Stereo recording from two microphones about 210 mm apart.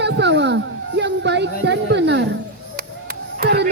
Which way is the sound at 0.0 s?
55° right (ahead or behind).